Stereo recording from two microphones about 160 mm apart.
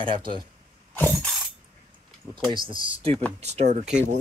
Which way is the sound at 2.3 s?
30° right (ahead or behind).